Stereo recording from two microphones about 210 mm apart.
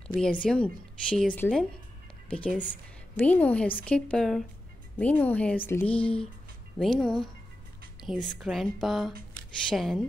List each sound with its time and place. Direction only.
0.2 s a woman's voice: 5° left (ahead or behind)